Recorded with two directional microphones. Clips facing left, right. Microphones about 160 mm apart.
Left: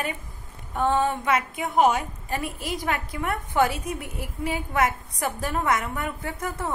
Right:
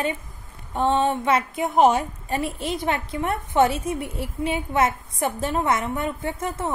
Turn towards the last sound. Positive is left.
turn(degrees=-25)  # may be behind; listen again after turning